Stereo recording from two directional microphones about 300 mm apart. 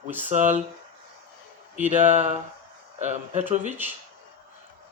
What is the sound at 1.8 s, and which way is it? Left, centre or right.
Speech, right.